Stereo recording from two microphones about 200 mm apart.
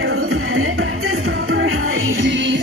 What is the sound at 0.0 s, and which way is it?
Music, 55° right (ahead or behind).